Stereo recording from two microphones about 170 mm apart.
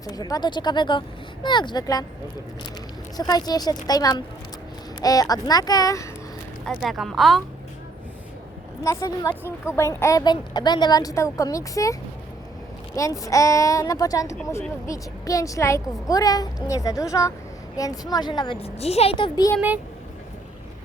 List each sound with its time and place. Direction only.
0.0 s a woman's voice: 20° left (ahead or behind)
3.2 s a woman's voice: 20° left (ahead or behind)
6.8 s speech: centre (ahead or behind)
8.8 s a woman's voice: 20° left (ahead or behind)
13.0 s a woman's voice: 20° left (ahead or behind)